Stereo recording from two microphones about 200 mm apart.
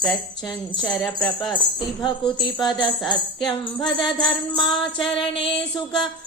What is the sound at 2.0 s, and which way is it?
Speech, 20° left (ahead or behind).